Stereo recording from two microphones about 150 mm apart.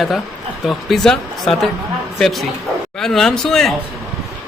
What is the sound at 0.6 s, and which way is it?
Speech, centre (ahead or behind).